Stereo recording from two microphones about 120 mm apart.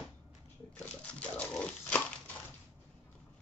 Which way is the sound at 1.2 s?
10° left (ahead or behind).